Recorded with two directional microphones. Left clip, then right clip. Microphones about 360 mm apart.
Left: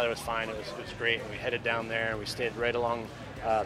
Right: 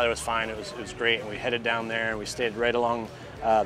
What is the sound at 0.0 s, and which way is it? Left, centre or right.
Speech, right.